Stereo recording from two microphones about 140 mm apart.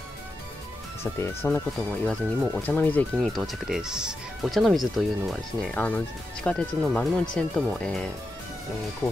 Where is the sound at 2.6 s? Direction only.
10° left (ahead or behind).